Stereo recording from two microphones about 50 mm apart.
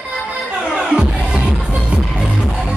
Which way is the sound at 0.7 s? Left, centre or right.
Centre.